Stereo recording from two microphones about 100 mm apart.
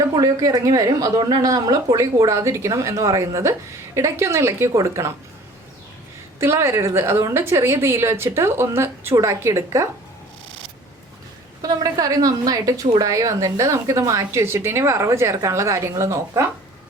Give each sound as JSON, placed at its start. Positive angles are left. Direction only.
{"t": 0.2, "sound": "a woman's voice", "side_deg": -35}
{"t": 6.4, "sound": "a woman's voice", "side_deg": -25}
{"t": 11.6, "sound": "a woman's voice", "side_deg": -40}